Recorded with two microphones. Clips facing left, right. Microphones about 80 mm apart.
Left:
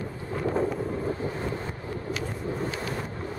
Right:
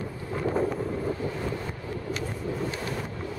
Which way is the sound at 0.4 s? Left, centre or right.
Centre.